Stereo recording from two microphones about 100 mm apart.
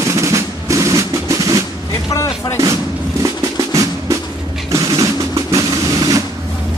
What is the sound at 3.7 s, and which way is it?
Music, 35° right (ahead or behind).